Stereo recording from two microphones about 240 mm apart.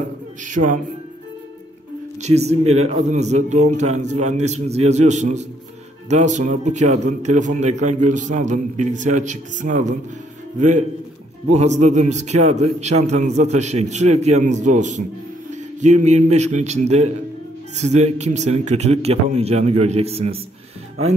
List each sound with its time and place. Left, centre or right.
2.2 s a man's voice: right